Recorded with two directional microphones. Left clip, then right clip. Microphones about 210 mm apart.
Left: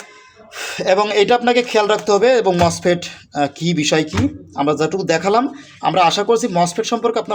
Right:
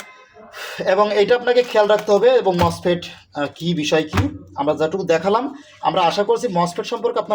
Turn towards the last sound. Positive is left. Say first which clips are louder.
# left 2 dB
turn(degrees=40)  # may be behind; listen again after turning